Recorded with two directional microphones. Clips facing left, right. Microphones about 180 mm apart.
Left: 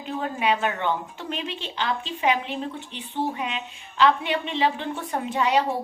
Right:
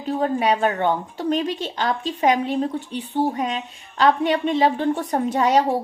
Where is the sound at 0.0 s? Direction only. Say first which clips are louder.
Right 6 dB; 35° right (ahead or behind).